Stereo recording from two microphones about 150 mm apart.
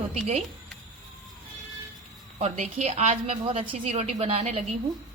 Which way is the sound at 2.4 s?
50° right (ahead or behind).